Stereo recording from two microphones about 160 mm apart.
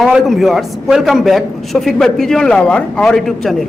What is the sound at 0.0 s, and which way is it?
A man's voice, centre (ahead or behind).